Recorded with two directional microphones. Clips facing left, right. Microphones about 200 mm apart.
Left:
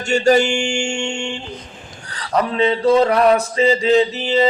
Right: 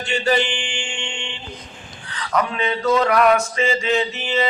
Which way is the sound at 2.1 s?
35° left (ahead or behind).